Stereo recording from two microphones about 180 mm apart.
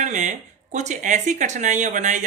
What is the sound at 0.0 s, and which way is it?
Speech, 40° right (ahead or behind).